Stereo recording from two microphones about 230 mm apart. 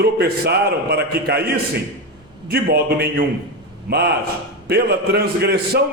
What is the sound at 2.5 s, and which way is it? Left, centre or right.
Speech, right.